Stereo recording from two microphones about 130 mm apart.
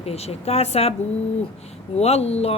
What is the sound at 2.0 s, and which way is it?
Speech, 55° left (ahead or behind).